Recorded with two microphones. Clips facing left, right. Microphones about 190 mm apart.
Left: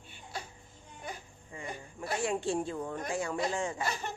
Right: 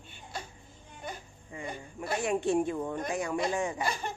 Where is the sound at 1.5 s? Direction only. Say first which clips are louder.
Right 3 dB; 20° right (ahead or behind).